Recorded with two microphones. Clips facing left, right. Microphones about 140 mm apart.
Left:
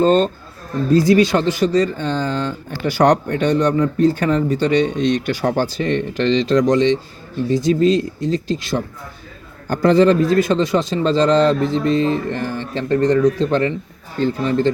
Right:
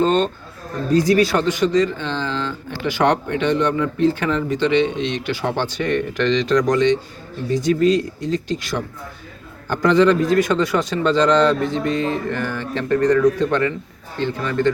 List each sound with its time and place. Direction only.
0.0 s speech: 40° left (ahead or behind)
0.9 s speech: 25° left (ahead or behind)
9.6 s speech: 40° left (ahead or behind)